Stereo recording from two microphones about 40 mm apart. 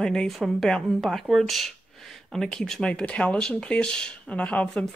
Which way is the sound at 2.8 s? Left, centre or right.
Left.